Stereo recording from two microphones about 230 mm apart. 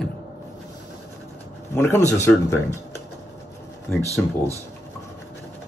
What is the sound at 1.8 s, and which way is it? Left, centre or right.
Speech, centre.